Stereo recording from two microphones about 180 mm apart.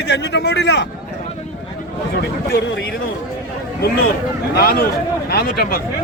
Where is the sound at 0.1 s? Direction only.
75° left (ahead or behind).